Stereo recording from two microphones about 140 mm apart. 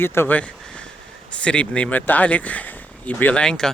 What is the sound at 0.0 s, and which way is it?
Speech, 15° left (ahead or behind).